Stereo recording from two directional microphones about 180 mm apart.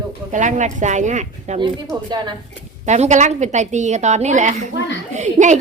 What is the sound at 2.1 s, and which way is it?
Speech, 25° right (ahead or behind).